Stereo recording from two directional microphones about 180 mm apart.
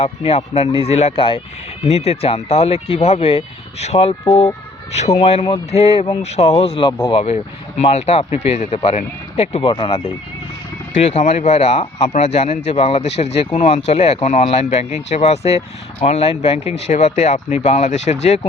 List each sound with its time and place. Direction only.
0.0 s speech: 35° left (ahead or behind)
4.2 s speech: 25° left (ahead or behind)
10.9 s speech: 40° left (ahead or behind)